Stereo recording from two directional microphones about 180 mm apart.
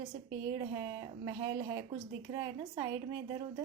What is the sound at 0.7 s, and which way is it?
A woman's voice, 20° right (ahead or behind).